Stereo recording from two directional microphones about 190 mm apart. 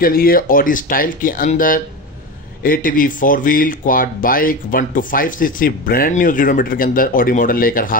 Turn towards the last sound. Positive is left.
turn(degrees=50)  # may be behind; listen again after turning